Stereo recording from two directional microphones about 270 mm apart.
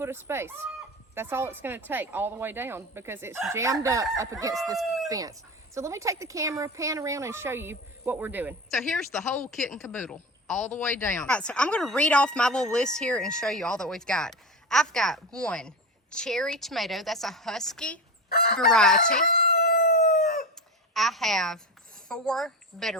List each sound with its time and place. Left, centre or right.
0.0 s a woman's voice: centre
18.3 s speech: left
18.5 s speech: centre
19.1 s chicken: left
20.9 s speech: centre